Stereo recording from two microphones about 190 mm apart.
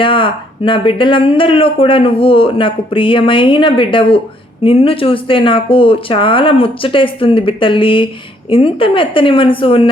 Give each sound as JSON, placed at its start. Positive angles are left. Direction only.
{"t": 0.0, "sound": "speech", "side_deg": 25}